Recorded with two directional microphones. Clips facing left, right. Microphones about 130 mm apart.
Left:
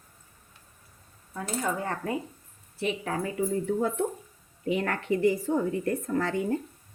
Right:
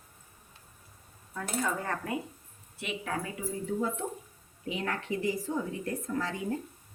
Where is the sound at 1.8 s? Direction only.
30° left (ahead or behind).